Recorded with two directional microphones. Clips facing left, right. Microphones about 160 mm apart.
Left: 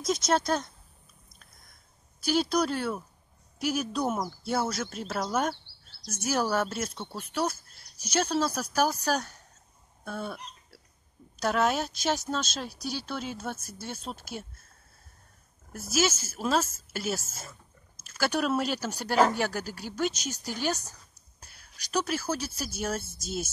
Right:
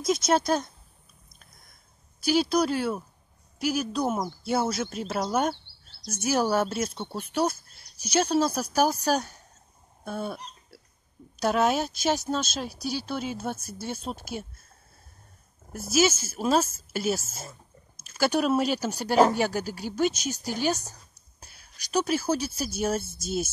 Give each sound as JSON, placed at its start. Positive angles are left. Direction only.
{"t": 0.0, "sound": "speech", "side_deg": -5}
{"t": 2.2, "sound": "speech", "side_deg": -5}
{"t": 4.5, "sound": "speech", "side_deg": -10}
{"t": 7.2, "sound": "speech", "side_deg": -25}
{"t": 8.0, "sound": "speech", "side_deg": -10}
{"t": 11.4, "sound": "speech", "side_deg": -10}
{"t": 15.9, "sound": "speech", "side_deg": -15}